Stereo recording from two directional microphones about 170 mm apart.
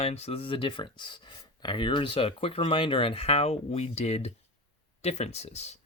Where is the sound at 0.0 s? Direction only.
35° left (ahead or behind).